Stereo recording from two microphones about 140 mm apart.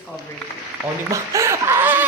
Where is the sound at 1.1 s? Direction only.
20° right (ahead or behind).